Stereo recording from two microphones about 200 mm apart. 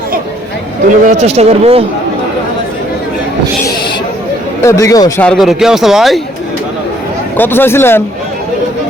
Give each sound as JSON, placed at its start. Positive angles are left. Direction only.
{"t": 1.0, "sound": "speech", "side_deg": -35}
{"t": 4.6, "sound": "speech", "side_deg": 15}
{"t": 5.2, "sound": "speech", "side_deg": 0}
{"t": 7.3, "sound": "speech", "side_deg": 10}